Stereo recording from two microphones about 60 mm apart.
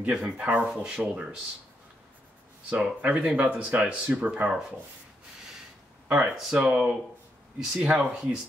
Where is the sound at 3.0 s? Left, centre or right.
Centre.